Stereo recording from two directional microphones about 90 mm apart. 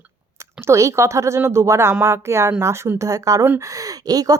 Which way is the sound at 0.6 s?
35° right (ahead or behind).